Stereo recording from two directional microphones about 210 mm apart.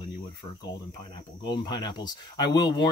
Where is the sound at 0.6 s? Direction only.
20° left (ahead or behind).